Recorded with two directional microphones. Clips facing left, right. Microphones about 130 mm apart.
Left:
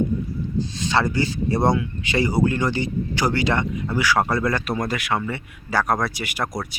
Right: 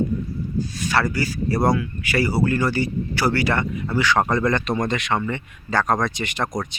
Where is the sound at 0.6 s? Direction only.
20° left (ahead or behind).